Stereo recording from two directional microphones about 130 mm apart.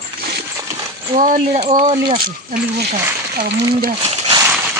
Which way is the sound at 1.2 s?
75° right (ahead or behind).